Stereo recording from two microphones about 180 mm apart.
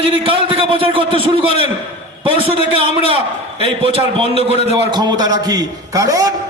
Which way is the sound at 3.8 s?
30° right (ahead or behind).